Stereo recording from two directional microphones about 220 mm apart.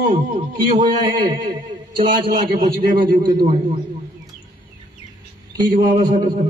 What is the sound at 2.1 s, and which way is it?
Speech, 45° right (ahead or behind).